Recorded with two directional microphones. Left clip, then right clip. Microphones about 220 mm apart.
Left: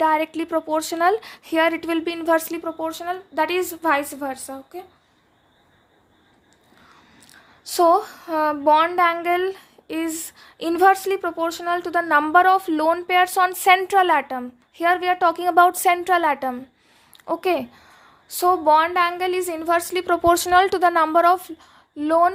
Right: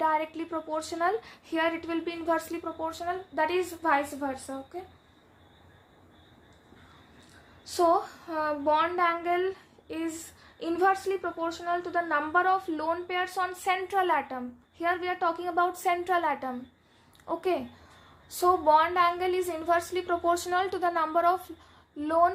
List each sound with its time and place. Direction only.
0.0 s a woman's voice: 45° left (ahead or behind)
7.3 s a woman's voice: 50° left (ahead or behind)